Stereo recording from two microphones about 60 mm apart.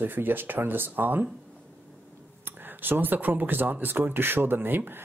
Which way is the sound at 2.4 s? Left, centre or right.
Right.